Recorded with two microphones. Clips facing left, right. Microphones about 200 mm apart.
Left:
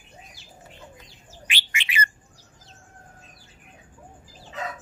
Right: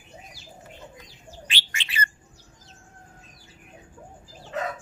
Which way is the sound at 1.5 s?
15° left (ahead or behind).